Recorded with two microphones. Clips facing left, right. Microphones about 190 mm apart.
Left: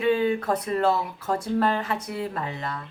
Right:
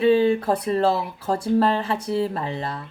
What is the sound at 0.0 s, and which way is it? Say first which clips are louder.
Speech: right 5 dB; 30° right (ahead or behind).